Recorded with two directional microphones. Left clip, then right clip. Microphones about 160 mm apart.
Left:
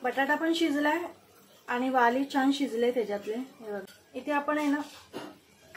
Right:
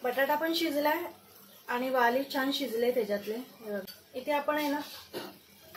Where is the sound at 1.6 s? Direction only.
25° left (ahead or behind).